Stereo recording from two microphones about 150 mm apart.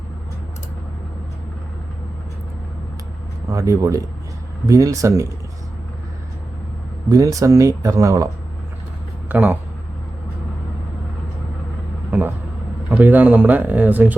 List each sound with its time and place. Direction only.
3.5 s speech: 20° right (ahead or behind)
7.1 s speech: 20° right (ahead or behind)
9.3 s speech: 10° right (ahead or behind)
12.1 s speech: 10° right (ahead or behind)